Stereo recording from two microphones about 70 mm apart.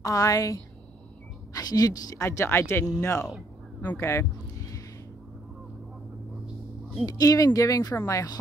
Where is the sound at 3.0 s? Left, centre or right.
Left.